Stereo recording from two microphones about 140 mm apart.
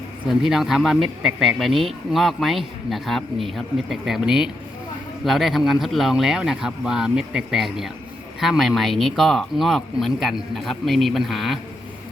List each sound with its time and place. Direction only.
0.4 s speech: 5° right (ahead or behind)